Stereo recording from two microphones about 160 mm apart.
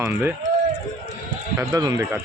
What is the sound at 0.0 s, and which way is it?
Speech, 10° right (ahead or behind).